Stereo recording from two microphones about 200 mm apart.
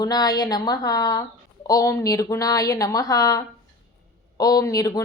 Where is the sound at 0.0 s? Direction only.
20° left (ahead or behind).